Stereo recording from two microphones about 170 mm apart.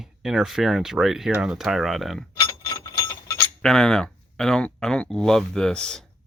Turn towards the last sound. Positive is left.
turn(degrees=5)  # may be behind; listen again after turning